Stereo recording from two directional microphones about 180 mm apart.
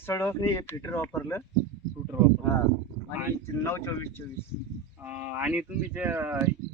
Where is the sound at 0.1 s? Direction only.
15° left (ahead or behind).